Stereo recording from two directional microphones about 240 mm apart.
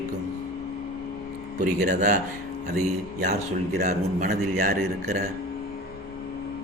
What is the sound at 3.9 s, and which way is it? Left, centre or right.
A man's voice, right.